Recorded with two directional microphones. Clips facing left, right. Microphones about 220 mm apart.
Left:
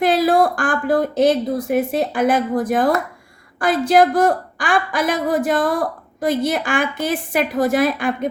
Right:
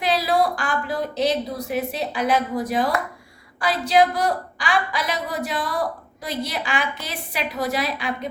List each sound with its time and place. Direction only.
0.0 s a woman's voice: 50° left (ahead or behind)